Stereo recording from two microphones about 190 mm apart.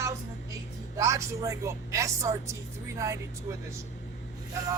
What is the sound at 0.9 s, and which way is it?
Speech, 15° right (ahead or behind).